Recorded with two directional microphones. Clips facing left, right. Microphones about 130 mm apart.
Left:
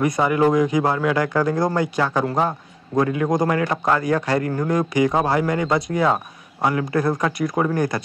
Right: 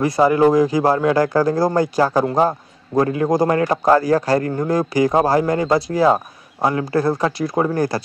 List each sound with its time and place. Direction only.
0.0 s a man's voice: 30° right (ahead or behind)